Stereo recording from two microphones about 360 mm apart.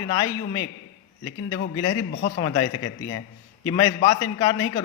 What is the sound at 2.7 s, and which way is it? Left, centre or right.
Speech, left.